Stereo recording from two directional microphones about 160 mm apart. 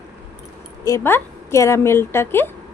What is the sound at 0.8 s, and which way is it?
Speech, 15° left (ahead or behind).